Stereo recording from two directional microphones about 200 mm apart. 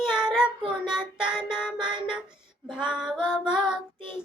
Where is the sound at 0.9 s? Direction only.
5° right (ahead or behind).